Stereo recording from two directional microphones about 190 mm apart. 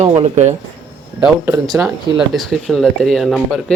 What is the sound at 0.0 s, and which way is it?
Speech, 35° right (ahead or behind).